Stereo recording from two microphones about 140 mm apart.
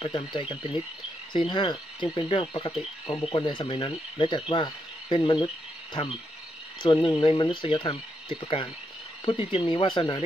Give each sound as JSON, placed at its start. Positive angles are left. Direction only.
{"t": 0.0, "sound": "speech", "side_deg": 35}
{"t": 6.8, "sound": "speech", "side_deg": 35}